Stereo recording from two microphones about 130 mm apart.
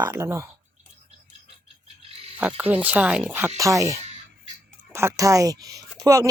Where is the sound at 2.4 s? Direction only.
15° right (ahead or behind).